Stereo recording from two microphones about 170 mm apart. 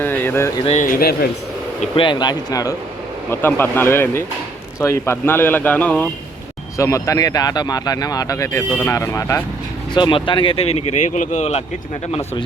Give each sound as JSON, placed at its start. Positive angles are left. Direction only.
{"t": 0.0, "sound": "speech", "side_deg": 10}
{"t": 0.6, "sound": "speech", "side_deg": 45}
{"t": 2.0, "sound": "speech", "side_deg": 25}
{"t": 9.9, "sound": "speech", "side_deg": 30}